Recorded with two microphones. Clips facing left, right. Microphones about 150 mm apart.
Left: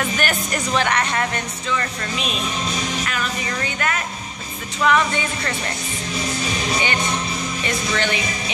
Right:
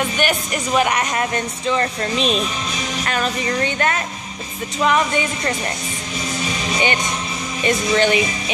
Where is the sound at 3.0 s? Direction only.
35° right (ahead or behind).